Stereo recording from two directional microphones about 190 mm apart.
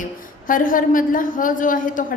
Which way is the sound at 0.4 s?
45° left (ahead or behind).